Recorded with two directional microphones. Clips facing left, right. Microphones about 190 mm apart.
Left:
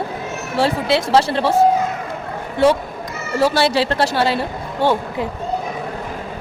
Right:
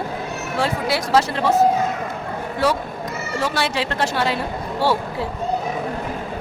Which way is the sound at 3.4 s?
35° left (ahead or behind).